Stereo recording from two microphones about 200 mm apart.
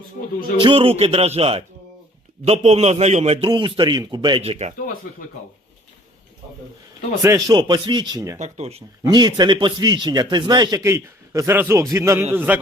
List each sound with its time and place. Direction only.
0.6 s a man's voice: 25° right (ahead or behind)
3.4 s a man's voice: 25° right (ahead or behind)
7.2 s a man's voice: 15° right (ahead or behind)
8.4 s a man's voice: 30° right (ahead or behind)
9.0 s a man's voice: 20° right (ahead or behind)